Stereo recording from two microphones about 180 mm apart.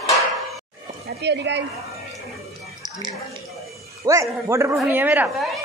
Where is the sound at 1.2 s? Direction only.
75° right (ahead or behind).